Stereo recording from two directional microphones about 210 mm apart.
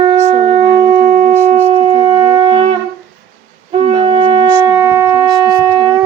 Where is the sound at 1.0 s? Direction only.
35° right (ahead or behind).